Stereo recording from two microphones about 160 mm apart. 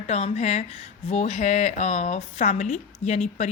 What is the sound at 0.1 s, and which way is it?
Speech, 45° left (ahead or behind).